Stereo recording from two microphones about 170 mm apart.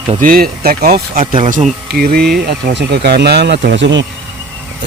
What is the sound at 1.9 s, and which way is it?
Speech, 65° right (ahead or behind).